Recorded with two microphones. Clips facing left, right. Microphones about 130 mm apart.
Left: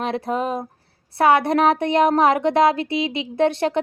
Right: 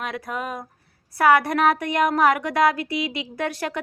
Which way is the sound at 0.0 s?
30° left (ahead or behind).